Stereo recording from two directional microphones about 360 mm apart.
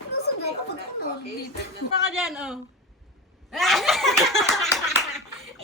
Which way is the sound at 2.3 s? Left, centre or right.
Centre.